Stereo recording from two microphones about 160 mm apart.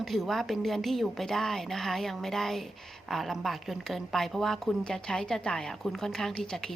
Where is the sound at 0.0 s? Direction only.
Centre (ahead or behind).